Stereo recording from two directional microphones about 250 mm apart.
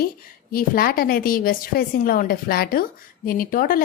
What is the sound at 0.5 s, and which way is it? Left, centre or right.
A woman's voice, left.